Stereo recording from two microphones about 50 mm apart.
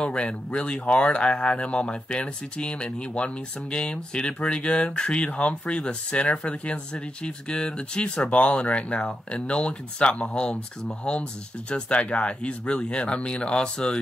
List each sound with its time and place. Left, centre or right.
0.0 s speech: left